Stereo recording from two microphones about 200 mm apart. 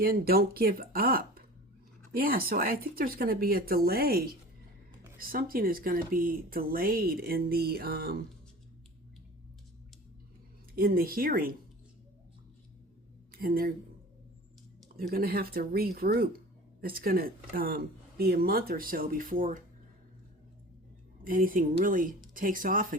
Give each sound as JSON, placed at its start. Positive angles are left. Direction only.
{"t": 0.0, "sound": "speech", "side_deg": -50}
{"t": 10.8, "sound": "speech", "side_deg": -45}
{"t": 13.3, "sound": "speech", "side_deg": -45}
{"t": 14.9, "sound": "speech", "side_deg": -50}
{"t": 21.2, "sound": "speech", "side_deg": -45}